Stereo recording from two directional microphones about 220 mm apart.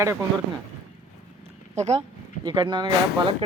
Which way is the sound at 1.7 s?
30° right (ahead or behind).